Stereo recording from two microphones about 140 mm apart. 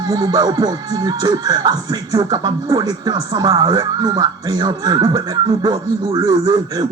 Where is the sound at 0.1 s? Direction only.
25° right (ahead or behind).